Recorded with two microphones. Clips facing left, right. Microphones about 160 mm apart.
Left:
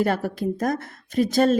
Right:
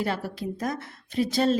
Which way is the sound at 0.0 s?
50° left (ahead or behind).